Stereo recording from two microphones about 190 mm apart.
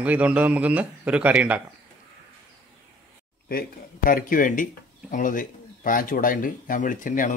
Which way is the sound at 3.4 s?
50° left (ahead or behind).